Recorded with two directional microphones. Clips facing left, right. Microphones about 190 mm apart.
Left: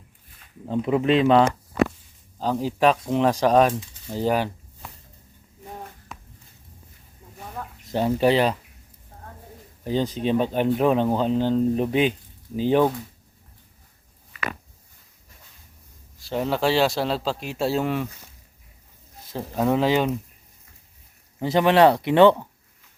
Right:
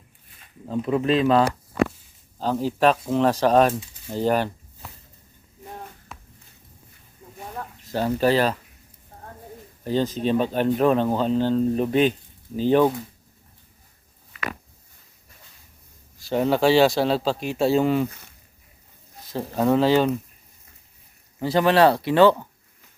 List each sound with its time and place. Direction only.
0.6 s speech: 20° left (ahead or behind)
2.4 s speech: 15° left (ahead or behind)
3.7 s speech: 5° right (ahead or behind)
4.1 s speech: 10° left (ahead or behind)
7.9 s speech: 20° left (ahead or behind)
9.8 s speech: 15° left (ahead or behind)
16.2 s speech: centre (ahead or behind)
19.5 s speech: 5° left (ahead or behind)
19.8 s speech: 15° left (ahead or behind)
21.3 s speech: 20° left (ahead or behind)